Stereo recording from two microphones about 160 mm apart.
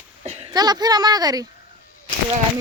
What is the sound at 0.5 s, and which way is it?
Speech, 25° right (ahead or behind).